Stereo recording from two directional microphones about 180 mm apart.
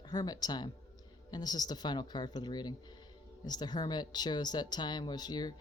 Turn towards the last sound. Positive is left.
turn(degrees=20)  # may be behind; listen again after turning